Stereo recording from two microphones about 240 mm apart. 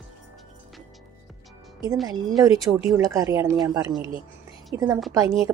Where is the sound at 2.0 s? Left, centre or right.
Centre.